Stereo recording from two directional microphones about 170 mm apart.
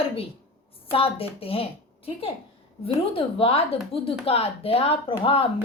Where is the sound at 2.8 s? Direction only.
35° left (ahead or behind).